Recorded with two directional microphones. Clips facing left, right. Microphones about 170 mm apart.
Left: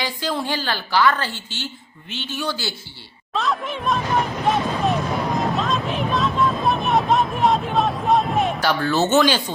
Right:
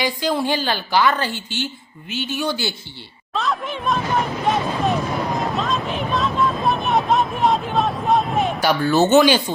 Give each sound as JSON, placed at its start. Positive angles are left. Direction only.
{"t": 0.0, "sound": "a woman's voice", "side_deg": -15}
{"t": 3.3, "sound": "speech", "side_deg": 0}
{"t": 4.4, "sound": "a sound", "side_deg": 0}
{"t": 5.4, "sound": "vehicle", "side_deg": 0}
{"t": 8.6, "sound": "a woman's voice", "side_deg": -10}